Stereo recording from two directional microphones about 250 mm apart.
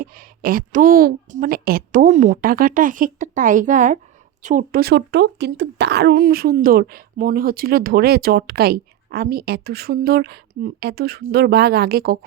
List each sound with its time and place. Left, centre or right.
0.0 s speech: right